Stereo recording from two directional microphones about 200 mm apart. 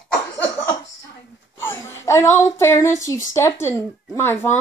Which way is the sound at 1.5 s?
10° left (ahead or behind).